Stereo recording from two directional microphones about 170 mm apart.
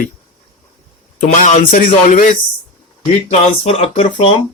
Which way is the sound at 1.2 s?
45° left (ahead or behind).